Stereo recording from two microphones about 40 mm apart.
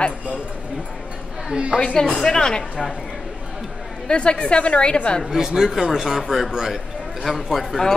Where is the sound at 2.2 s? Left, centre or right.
Centre.